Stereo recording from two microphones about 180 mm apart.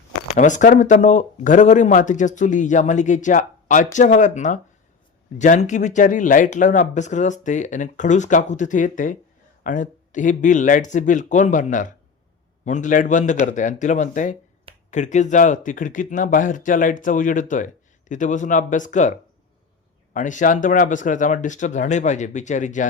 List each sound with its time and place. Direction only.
0.3 s speech: 45° left (ahead or behind)